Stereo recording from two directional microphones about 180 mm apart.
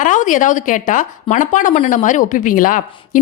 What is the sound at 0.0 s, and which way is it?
A woman's voice, 45° left (ahead or behind).